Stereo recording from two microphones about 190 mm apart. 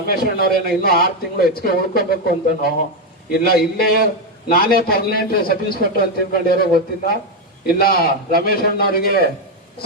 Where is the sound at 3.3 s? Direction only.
55° left (ahead or behind).